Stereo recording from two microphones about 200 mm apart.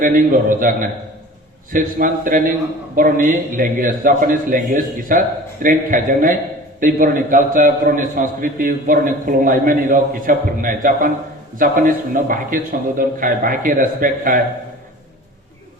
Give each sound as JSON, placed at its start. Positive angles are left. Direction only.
{"t": 0.0, "sound": "a man's voice", "side_deg": -40}